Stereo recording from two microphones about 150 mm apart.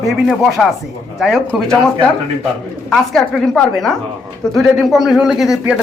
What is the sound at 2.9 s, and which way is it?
Speech, centre (ahead or behind).